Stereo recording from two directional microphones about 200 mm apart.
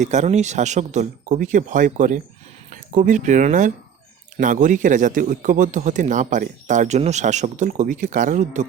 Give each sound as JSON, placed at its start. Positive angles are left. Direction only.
{"t": 0.0, "sound": "a man's voice", "side_deg": -35}